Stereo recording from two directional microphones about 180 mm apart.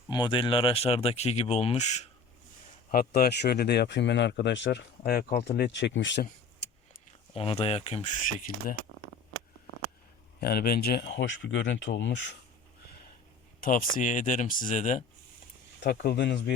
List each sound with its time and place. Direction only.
0.1 s speech: 25° left (ahead or behind)
2.9 s speech: 55° left (ahead or behind); by 6.2 s 90° left
7.3 s speech: 30° left (ahead or behind)
8.5 s speech: 50° left (ahead or behind)
10.4 s speech: 60° left (ahead or behind); by 12.3 s 90° left
13.6 s speech: 50° left (ahead or behind)
15.8 s speech: 65° left (ahead or behind)